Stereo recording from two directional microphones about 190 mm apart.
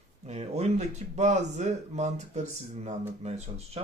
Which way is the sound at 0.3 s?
35° right (ahead or behind).